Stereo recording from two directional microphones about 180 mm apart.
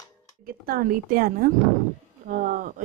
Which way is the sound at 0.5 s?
55° right (ahead or behind).